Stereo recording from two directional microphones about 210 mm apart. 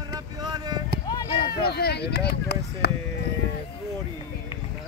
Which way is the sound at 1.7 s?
50° left (ahead or behind).